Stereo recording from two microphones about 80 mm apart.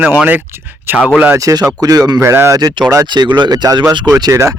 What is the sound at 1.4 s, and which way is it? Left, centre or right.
Speech, right.